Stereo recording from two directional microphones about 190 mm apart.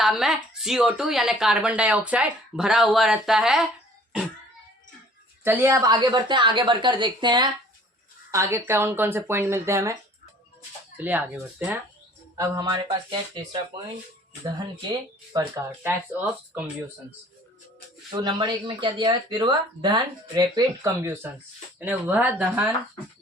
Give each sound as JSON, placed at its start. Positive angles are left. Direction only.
{"t": 0.0, "sound": "speech", "side_deg": 0}
{"t": 5.4, "sound": "speech", "side_deg": -10}
{"t": 12.4, "sound": "speech", "side_deg": -20}
{"t": 18.2, "sound": "speech", "side_deg": -25}